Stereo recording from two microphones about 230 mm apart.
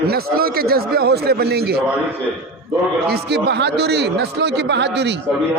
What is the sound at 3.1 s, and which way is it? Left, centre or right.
A man's voice, right.